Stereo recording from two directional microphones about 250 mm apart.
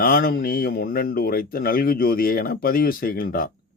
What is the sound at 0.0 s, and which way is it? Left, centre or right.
Speech, left.